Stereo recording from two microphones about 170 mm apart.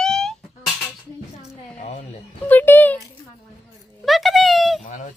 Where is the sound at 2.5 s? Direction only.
10° left (ahead or behind).